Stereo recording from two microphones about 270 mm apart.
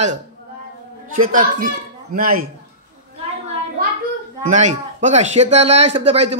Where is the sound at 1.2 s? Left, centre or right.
Right.